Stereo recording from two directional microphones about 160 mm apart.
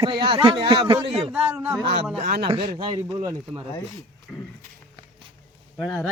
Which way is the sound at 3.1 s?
25° right (ahead or behind).